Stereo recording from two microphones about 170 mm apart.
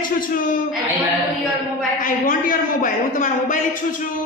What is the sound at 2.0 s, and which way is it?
A man's voice, 55° left (ahead or behind).